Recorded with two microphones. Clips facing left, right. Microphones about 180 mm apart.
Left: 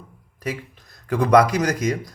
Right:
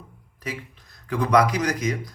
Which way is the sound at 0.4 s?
45° left (ahead or behind).